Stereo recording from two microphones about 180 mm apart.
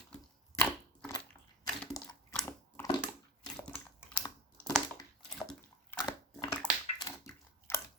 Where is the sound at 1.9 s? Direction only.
20° left (ahead or behind).